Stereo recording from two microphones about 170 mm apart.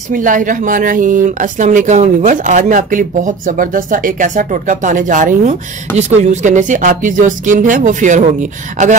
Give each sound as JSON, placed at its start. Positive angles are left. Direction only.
{"t": 0.1, "sound": "speech", "side_deg": -50}